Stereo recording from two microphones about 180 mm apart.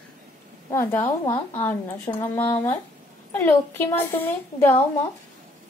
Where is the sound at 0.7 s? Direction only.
15° left (ahead or behind).